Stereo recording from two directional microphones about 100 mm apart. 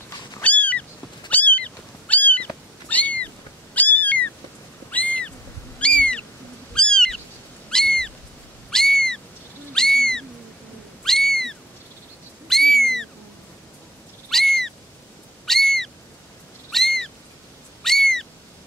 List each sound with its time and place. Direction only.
0.4 s a sound: 15° left (ahead or behind)
1.3 s cat: 15° left (ahead or behind)
4.9 s a sound: 15° left (ahead or behind)
5.8 s owl: 10° left (ahead or behind)
6.7 s cat: 10° left (ahead or behind)
7.7 s a sound: 5° left (ahead or behind)
9.8 s owl: 5° left (ahead or behind)
11.1 s cat: 5° left (ahead or behind)
12.4 s owl: 5° left (ahead or behind)
14.3 s owl: 5° left (ahead or behind)
16.7 s cat: 5° left (ahead or behind)
17.8 s owl: 5° left (ahead or behind)